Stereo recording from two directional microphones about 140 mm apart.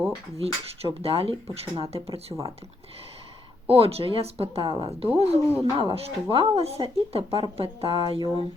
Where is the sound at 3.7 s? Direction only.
45° right (ahead or behind).